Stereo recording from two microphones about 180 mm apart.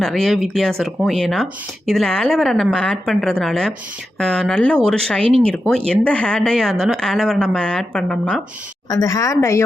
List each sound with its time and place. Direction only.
0.0 s a woman's voice: centre (ahead or behind)
5.2 s speech: 30° right (ahead or behind)
5.5 s a woman's voice: 5° left (ahead or behind)
8.9 s speech: 20° left (ahead or behind)